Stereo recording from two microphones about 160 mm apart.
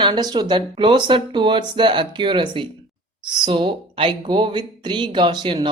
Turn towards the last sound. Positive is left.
turn(degrees=-30)  # may be behind; listen again after turning